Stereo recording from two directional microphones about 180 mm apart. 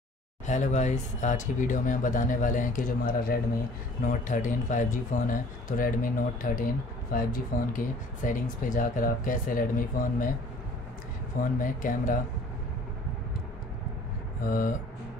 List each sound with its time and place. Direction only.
0.5 s speech: 40° left (ahead or behind)
11.6 s speech: 50° left (ahead or behind)
14.4 s speech: 50° left (ahead or behind)